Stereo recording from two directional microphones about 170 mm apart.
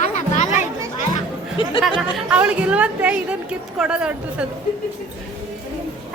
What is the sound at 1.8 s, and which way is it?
A woman's voice, centre (ahead or behind).